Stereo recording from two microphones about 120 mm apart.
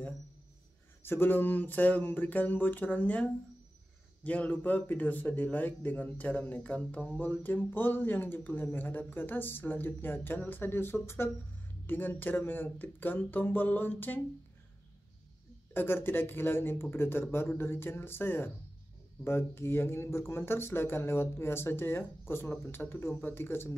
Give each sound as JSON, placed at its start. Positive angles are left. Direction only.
{"t": 1.0, "sound": "speech", "side_deg": 20}
{"t": 15.7, "sound": "speech", "side_deg": 20}